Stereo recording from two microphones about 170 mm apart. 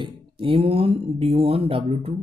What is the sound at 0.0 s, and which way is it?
Speech, 30° right (ahead or behind).